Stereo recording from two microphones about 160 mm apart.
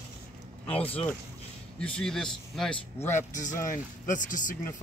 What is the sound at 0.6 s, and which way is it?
Speech, 35° left (ahead or behind).